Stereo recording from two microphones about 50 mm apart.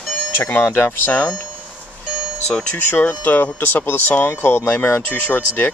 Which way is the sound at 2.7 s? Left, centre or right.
Left.